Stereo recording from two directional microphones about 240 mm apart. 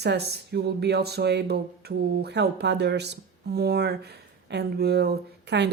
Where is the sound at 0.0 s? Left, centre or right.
Right.